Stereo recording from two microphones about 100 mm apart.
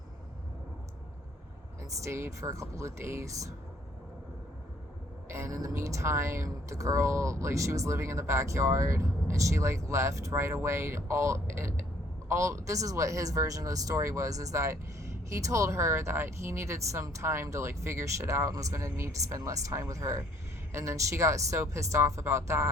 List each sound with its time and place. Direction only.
2.0 s a woman's voice: 25° right (ahead or behind)
5.3 s a woman's voice: 30° right (ahead or behind)